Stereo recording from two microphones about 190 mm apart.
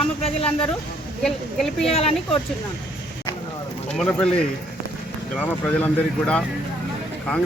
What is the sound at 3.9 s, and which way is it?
Speech, 5° left (ahead or behind).